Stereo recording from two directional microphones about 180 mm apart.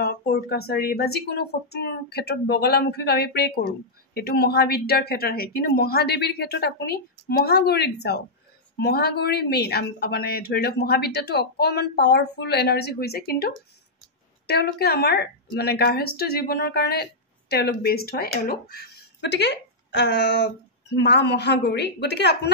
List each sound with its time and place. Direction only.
0.0 s speech: 60° left (ahead or behind)